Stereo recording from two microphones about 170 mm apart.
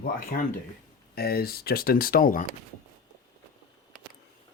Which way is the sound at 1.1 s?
65° left (ahead or behind).